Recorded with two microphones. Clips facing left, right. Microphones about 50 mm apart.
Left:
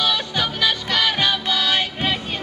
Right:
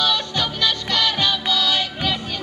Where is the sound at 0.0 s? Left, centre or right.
Centre.